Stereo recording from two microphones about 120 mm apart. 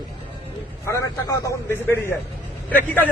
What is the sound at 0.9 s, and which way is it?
Speech, 25° left (ahead or behind).